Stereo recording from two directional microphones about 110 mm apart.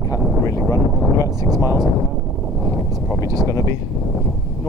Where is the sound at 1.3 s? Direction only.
35° right (ahead or behind).